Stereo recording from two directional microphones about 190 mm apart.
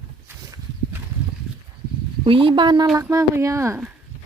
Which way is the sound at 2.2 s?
30° right (ahead or behind).